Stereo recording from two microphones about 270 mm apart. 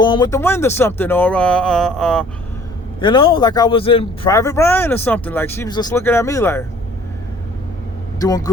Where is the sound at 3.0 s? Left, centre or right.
Centre.